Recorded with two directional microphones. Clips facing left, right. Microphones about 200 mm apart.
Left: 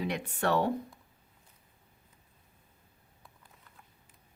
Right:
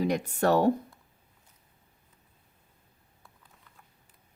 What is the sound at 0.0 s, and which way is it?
Speech, 40° right (ahead or behind).